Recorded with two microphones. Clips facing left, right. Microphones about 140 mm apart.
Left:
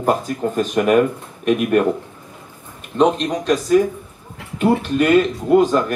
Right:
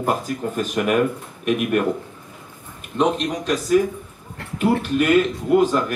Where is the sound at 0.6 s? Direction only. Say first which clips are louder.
Left 5 dB; 30° left (ahead or behind).